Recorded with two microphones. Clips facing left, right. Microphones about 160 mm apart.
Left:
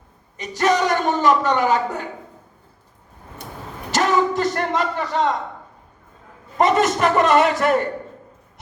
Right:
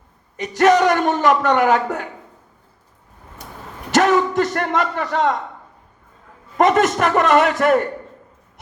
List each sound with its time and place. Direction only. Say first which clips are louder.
0.3 s a man's voice: right 5 dB; 55° right (ahead or behind)
3.9 s a sound: right 3 dB; 55° right (ahead or behind)
6.6 s a man's voice: right 2 dB; 55° right (ahead or behind)